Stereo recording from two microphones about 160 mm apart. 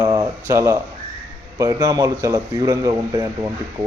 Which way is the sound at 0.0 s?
20° right (ahead or behind).